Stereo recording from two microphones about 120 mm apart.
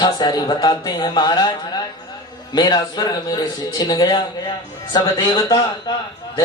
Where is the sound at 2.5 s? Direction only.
35° left (ahead or behind).